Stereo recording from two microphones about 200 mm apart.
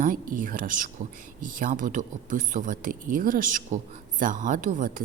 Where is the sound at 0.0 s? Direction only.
40° right (ahead or behind).